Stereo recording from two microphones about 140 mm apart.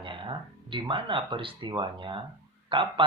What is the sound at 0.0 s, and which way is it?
Speech, 35° right (ahead or behind).